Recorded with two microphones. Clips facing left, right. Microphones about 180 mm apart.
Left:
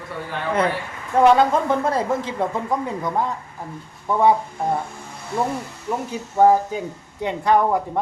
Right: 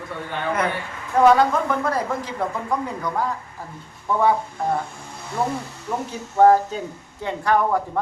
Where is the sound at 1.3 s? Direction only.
25° left (ahead or behind).